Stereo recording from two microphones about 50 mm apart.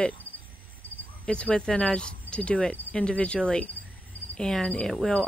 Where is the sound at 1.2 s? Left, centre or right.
Left.